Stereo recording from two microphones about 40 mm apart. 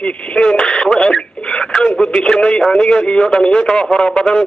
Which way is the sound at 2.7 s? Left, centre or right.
Left.